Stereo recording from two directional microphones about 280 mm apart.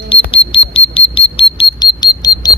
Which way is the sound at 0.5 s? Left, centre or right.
Centre.